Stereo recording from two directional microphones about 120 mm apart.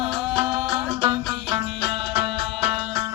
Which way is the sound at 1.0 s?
35° right (ahead or behind).